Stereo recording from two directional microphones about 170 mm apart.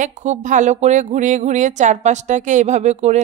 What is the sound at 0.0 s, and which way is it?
Speech, 45° right (ahead or behind).